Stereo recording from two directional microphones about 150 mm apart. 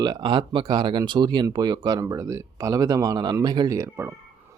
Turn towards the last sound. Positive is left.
turn(degrees=-20)  # may be behind; listen again after turning